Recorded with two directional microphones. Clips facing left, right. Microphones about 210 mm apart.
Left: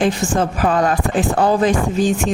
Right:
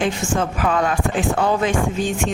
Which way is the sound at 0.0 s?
35° left (ahead or behind).